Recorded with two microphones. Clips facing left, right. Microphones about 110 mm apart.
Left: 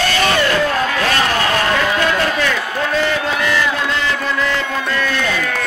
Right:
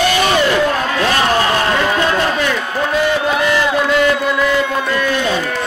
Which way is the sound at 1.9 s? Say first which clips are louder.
Right 1 dB; 25° right (ahead or behind).